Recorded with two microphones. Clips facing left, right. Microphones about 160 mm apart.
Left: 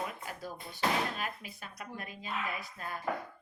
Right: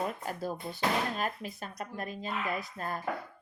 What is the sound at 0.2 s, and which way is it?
A woman's voice, 45° right (ahead or behind).